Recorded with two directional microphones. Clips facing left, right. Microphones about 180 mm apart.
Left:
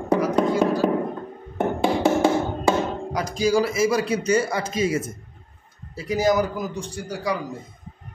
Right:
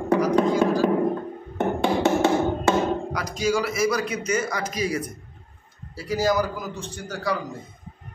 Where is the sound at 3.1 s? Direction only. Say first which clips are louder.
Left 3 dB; 30° left (ahead or behind); by 7.4 s 10° left (ahead or behind).